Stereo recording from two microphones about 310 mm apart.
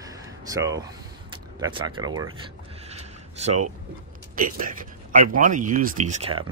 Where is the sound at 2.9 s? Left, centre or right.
Right.